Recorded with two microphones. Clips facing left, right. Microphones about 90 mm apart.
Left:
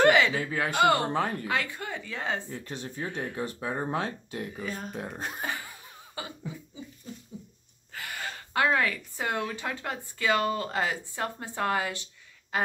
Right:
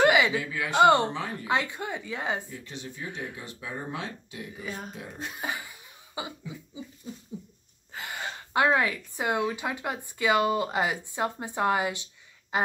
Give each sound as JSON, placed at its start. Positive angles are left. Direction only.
{"t": 0.0, "sound": "a sound", "side_deg": -10}
{"t": 0.3, "sound": "speech", "side_deg": 45}
{"t": 0.7, "sound": "speech", "side_deg": -25}
{"t": 1.1, "sound": "speech", "side_deg": 50}
{"t": 1.5, "sound": "speech", "side_deg": -20}
{"t": 2.5, "sound": "speech", "side_deg": 45}
{"t": 4.6, "sound": "speech", "side_deg": -5}
{"t": 4.9, "sound": "speech", "side_deg": 50}
{"t": 5.4, "sound": "laughter", "side_deg": -15}
{"t": 6.2, "sound": "speech", "side_deg": -15}
{"t": 7.9, "sound": "speech", "side_deg": -20}